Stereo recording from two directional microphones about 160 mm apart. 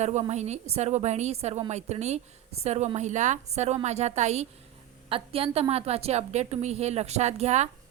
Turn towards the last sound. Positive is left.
turn(degrees=-45)  # may be behind; listen again after turning